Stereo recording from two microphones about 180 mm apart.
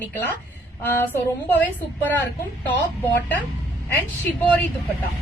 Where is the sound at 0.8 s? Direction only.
10° left (ahead or behind).